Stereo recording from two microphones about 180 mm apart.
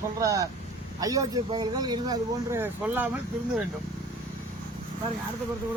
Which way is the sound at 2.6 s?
10° right (ahead or behind).